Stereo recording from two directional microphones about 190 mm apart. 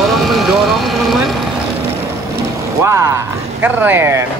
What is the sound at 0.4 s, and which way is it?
Vehicle, centre (ahead or behind).